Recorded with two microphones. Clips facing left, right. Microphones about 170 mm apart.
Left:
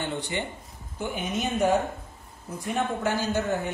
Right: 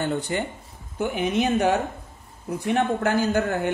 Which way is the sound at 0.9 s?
65° right (ahead or behind).